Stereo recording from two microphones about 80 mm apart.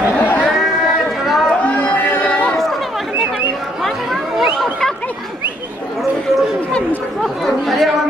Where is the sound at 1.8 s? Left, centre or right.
Centre.